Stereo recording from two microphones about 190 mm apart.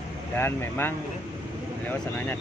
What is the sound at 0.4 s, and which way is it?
Speech, 10° left (ahead or behind).